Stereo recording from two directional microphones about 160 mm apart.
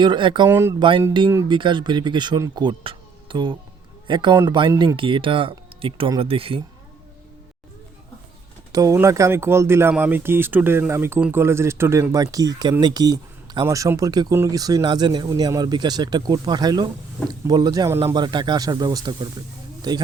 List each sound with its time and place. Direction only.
0.0 s speech: 30° right (ahead or behind)
8.7 s speech: 20° right (ahead or behind)